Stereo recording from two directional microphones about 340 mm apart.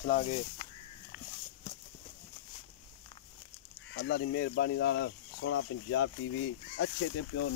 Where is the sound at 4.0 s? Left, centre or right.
Left.